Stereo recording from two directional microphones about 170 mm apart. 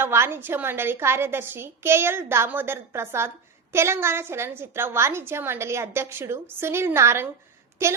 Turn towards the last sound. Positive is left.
turn(degrees=-15)  # may be behind; listen again after turning